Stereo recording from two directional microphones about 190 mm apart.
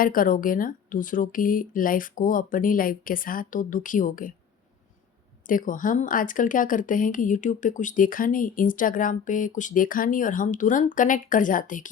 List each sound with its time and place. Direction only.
0.0 s speech: 45° left (ahead or behind)
5.5 s speech: 45° left (ahead or behind)